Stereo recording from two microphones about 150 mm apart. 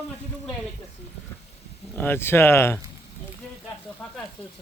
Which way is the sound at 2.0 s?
15° left (ahead or behind).